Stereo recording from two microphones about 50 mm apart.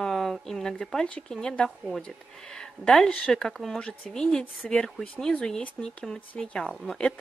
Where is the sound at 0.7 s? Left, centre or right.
Left.